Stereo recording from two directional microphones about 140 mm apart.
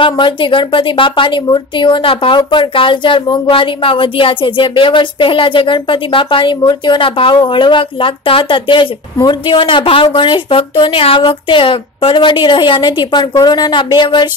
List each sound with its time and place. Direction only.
0.0 s a woman's voice: 35° left (ahead or behind)